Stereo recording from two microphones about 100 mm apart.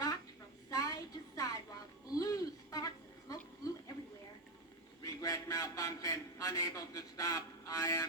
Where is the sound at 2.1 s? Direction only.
35° left (ahead or behind).